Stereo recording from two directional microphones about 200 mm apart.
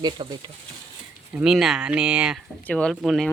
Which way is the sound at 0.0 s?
20° right (ahead or behind).